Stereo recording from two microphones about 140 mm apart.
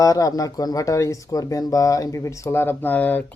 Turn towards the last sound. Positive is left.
turn(degrees=10)  # may be behind; listen again after turning